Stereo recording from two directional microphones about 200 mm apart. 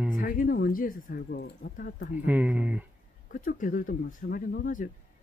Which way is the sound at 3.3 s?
40° left (ahead or behind).